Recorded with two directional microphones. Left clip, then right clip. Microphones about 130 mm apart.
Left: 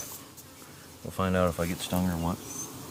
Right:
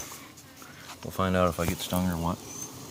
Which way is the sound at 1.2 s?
35° right (ahead or behind).